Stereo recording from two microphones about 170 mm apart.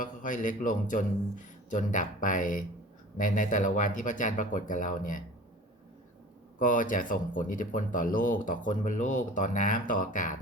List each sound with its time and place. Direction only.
0.0 s speech: 50° left (ahead or behind)
6.6 s speech: 50° left (ahead or behind)